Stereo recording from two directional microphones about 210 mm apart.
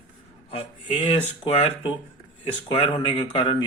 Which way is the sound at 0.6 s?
25° left (ahead or behind).